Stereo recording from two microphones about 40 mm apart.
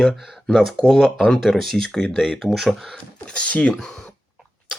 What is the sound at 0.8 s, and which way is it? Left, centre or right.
Speech, centre.